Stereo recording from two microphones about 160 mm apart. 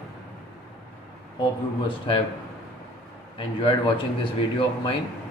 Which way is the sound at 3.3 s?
30° left (ahead or behind).